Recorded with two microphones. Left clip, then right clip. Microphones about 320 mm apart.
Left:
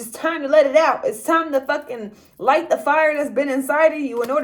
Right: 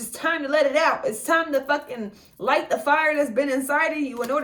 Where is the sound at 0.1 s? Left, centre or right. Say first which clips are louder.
Left 5 dB; centre.